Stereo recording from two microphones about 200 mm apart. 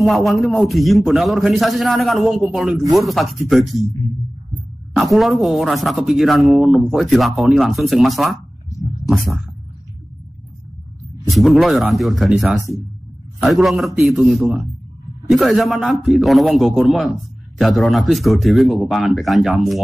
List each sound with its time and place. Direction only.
0.0 s a man's voice: centre (ahead or behind)
4.9 s a man's voice: centre (ahead or behind)
8.6 s a sound: 15° left (ahead or behind)
11.2 s a man's voice: centre (ahead or behind)